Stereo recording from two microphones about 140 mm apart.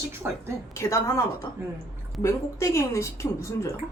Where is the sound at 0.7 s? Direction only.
20° left (ahead or behind).